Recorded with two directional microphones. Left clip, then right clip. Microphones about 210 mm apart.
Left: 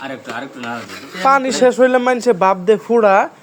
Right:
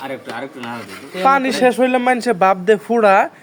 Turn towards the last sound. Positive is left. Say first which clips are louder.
# left 1 dB
turn(degrees=0)  # may be behind; listen again after turning